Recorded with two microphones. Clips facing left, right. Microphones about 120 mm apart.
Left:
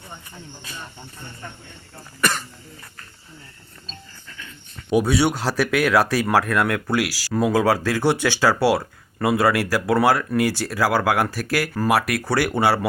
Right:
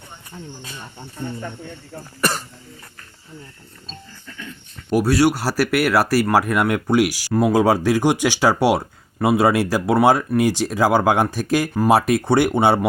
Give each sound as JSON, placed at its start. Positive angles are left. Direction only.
{"t": 5.0, "sound": "speech", "side_deg": 0}